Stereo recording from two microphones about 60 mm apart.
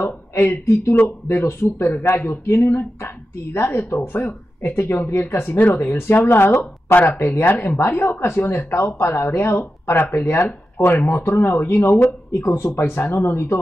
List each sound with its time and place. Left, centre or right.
0.0 s speech: left
7.2 s speech: left
12.6 s speech: left
12.9 s speech: left